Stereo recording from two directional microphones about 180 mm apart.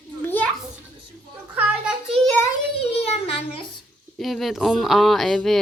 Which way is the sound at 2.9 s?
35° left (ahead or behind).